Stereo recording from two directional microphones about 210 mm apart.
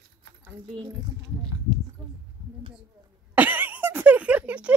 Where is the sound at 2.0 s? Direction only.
20° right (ahead or behind).